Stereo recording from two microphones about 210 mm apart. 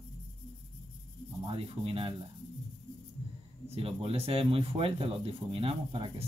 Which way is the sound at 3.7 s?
25° right (ahead or behind).